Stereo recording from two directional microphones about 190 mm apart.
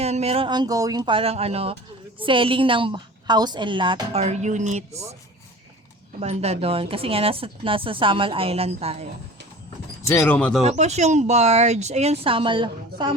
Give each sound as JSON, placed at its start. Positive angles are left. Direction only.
{"t": 0.0, "sound": "a woman's voice", "side_deg": -35}
{"t": 6.1, "sound": "a woman's voice", "side_deg": -35}
{"t": 10.1, "sound": "speech", "side_deg": 10}
{"t": 10.6, "sound": "speech", "side_deg": -35}